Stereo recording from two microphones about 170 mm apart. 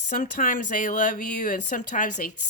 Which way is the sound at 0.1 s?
50° left (ahead or behind).